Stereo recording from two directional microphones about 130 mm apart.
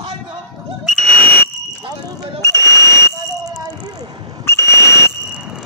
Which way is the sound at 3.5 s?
30° right (ahead or behind).